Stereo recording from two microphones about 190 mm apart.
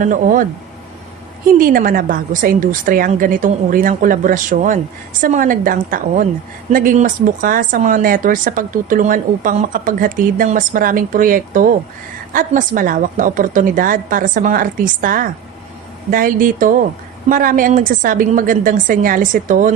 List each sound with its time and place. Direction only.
0.0 s speech: 45° right (ahead or behind)
1.5 s speech: 45° right (ahead or behind)